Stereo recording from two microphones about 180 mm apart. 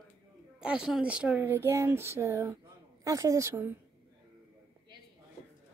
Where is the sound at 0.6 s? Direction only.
5° right (ahead or behind).